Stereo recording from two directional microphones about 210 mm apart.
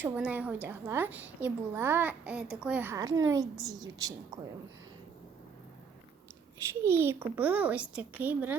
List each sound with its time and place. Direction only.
0.0 s a woman's voice: 10° right (ahead or behind)
6.8 s a woman's voice: 10° right (ahead or behind)